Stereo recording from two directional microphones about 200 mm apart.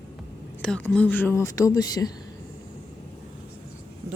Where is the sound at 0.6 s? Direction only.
5° left (ahead or behind).